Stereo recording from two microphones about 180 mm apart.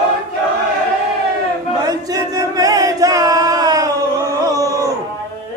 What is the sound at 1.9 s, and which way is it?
Chant, 20° right (ahead or behind).